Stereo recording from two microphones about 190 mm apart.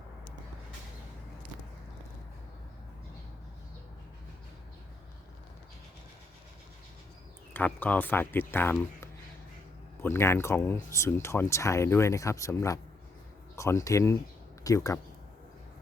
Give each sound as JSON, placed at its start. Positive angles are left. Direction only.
{"t": 7.5, "sound": "speech", "side_deg": 10}